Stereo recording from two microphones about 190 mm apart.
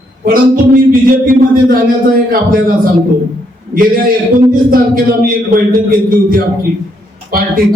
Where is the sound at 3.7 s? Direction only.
50° right (ahead or behind).